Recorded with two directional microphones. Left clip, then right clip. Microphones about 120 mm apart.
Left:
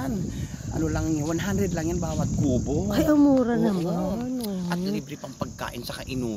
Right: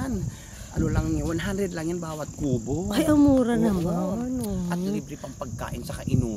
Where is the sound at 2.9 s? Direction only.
10° right (ahead or behind).